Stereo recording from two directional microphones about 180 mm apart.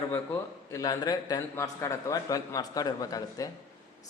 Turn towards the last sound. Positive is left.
turn(degrees=20)  # may be behind; listen again after turning